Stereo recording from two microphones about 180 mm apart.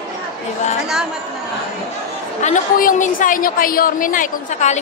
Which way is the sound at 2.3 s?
45° left (ahead or behind).